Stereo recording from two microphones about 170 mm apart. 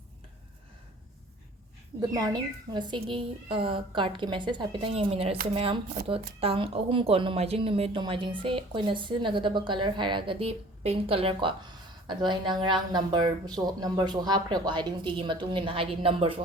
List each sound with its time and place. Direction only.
2.0 s a woman's voice: 20° right (ahead or behind)